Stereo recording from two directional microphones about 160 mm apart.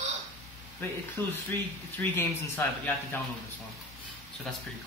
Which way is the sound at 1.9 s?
10° left (ahead or behind).